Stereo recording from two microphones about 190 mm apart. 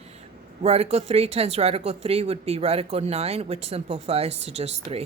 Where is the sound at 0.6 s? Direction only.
35° right (ahead or behind).